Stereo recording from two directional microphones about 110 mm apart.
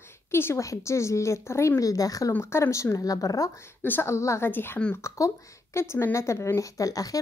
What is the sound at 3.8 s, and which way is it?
A woman's voice, 20° left (ahead or behind).